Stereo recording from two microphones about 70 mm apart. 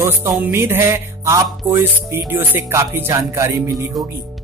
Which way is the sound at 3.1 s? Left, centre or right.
Right.